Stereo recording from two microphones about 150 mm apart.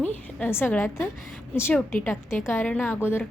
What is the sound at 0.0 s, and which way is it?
A woman's voice, 10° left (ahead or behind).